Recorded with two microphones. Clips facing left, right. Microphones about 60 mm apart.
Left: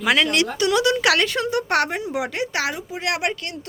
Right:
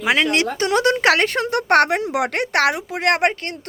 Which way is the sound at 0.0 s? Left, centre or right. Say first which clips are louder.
Right 1 dB; right.